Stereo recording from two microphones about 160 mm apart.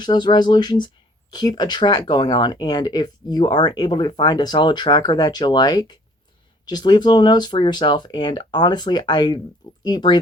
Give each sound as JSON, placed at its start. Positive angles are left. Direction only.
{"t": 0.0, "sound": "speech", "side_deg": 25}